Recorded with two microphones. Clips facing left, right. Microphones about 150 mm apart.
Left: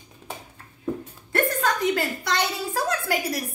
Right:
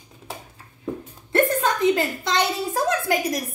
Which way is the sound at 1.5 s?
25° right (ahead or behind).